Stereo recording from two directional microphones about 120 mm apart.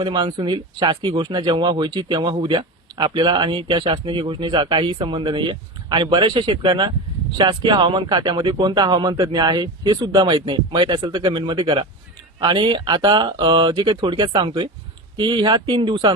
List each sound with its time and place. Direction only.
0.0 s speech: 40° right (ahead or behind)